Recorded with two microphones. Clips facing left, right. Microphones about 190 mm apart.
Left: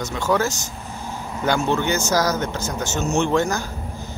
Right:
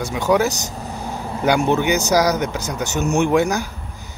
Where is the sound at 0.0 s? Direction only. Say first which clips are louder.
Right 4 dB; 15° right (ahead or behind).